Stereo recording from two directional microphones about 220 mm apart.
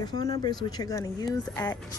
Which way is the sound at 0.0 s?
15° left (ahead or behind).